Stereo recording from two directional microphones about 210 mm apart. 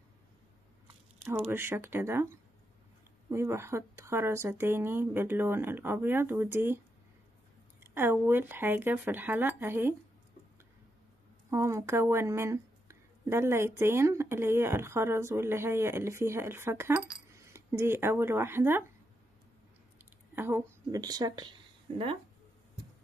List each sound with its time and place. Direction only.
1.5 s speech: 10° right (ahead or behind)
7.8 s speech: 10° right (ahead or behind)
11.5 s speech: 15° right (ahead or behind)
20.3 s speech: 10° right (ahead or behind)